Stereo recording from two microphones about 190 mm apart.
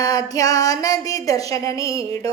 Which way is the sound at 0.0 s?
20° left (ahead or behind).